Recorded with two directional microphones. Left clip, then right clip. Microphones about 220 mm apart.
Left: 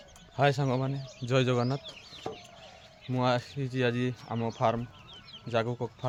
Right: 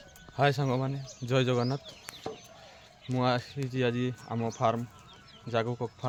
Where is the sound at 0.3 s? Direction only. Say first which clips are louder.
Even; 10° right (ahead or behind).